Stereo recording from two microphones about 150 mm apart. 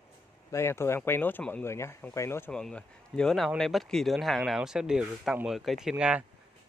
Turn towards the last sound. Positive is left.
turn(degrees=-5)  # may be behind; listen again after turning